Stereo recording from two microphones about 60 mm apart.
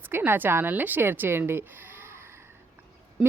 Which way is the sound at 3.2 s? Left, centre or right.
Centre.